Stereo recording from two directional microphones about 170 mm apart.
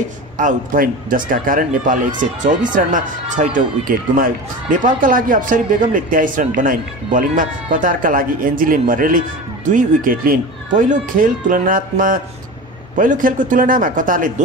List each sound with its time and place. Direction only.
0.4 s speech: 50° right (ahead or behind)